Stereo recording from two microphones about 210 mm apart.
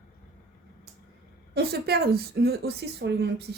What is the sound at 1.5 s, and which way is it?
Speech, 50° right (ahead or behind).